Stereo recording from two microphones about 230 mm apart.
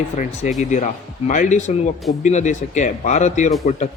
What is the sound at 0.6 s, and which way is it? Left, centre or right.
Speech, left.